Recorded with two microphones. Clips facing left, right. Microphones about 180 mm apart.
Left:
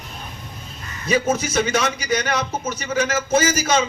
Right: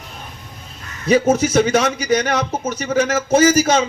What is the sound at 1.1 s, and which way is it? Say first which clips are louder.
A man's voice: right 6 dB; 40° right (ahead or behind).